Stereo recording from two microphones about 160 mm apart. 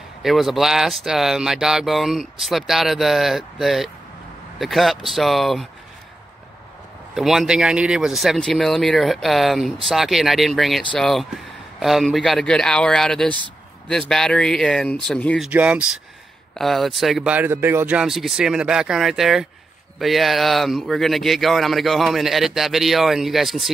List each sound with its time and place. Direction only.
0.2 s speech: centre (ahead or behind)
7.2 s speech: centre (ahead or behind)
15.4 s speech: 10° right (ahead or behind)